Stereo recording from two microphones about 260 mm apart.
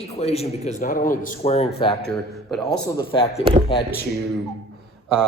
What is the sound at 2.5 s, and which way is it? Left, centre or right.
Speech, centre.